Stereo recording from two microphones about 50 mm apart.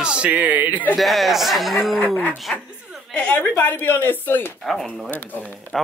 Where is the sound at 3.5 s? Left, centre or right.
Left.